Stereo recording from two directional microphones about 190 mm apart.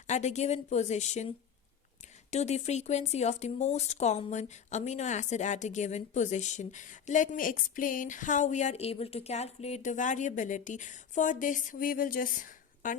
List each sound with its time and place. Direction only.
0.1 s speech: 35° left (ahead or behind)
2.3 s speech: 35° left (ahead or behind)